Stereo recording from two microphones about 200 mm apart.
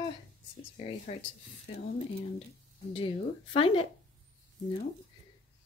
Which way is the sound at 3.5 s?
25° left (ahead or behind).